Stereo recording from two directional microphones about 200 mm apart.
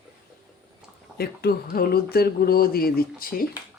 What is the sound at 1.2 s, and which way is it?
Speech, 50° left (ahead or behind).